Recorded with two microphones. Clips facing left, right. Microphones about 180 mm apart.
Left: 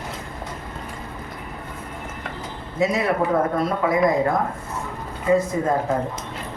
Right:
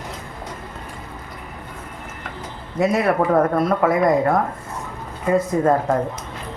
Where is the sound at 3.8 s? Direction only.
65° right (ahead or behind).